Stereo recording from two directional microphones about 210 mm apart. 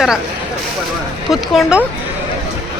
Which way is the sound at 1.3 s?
Centre (ahead or behind).